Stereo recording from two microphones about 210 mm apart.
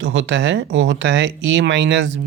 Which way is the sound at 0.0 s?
65° right (ahead or behind).